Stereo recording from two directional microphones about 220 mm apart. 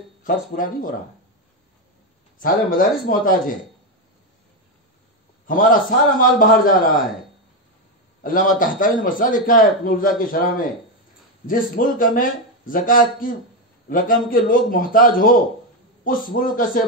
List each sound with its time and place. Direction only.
0.2 s a man's voice: 40° left (ahead or behind)
2.4 s a man's voice: 40° left (ahead or behind)
5.5 s a man's voice: 40° left (ahead or behind)
8.2 s a man's voice: 40° left (ahead or behind)